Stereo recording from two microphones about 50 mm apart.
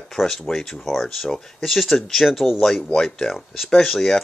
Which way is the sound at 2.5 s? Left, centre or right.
Centre.